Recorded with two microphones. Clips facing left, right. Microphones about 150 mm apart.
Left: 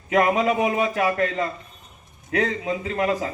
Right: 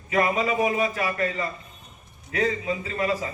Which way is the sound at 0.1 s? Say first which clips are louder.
Left 4 dB; 65° left (ahead or behind).